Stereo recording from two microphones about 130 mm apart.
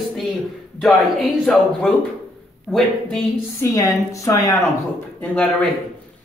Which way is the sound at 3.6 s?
25° left (ahead or behind).